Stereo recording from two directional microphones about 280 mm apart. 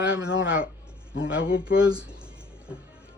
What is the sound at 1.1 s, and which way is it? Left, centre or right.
Speech, left.